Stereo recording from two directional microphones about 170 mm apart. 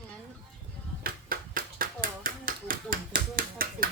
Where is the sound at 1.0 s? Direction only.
55° right (ahead or behind).